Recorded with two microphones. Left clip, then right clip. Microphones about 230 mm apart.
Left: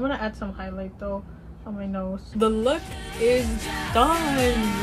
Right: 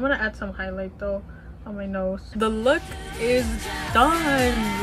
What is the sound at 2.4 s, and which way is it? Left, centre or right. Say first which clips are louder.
Music: right 1 dB; centre.